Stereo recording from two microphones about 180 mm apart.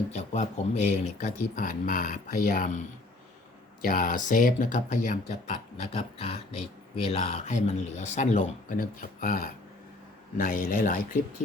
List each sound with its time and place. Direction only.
0.1 s speech: 40° left (ahead or behind)